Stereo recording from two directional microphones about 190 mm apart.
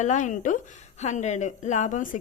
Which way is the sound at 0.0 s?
40° left (ahead or behind).